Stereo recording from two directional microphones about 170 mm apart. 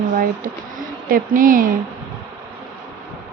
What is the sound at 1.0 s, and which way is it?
Speech, 55° right (ahead or behind).